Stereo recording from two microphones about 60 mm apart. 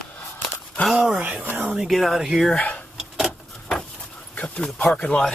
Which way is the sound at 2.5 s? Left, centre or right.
Left.